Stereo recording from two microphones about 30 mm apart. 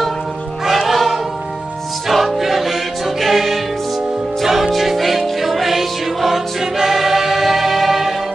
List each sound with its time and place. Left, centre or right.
0.7 s music: centre
5.4 s choir: centre